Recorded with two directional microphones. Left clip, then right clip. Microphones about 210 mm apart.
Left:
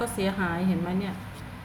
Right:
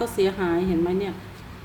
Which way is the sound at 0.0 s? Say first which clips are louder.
Right 5 dB; 30° right (ahead or behind).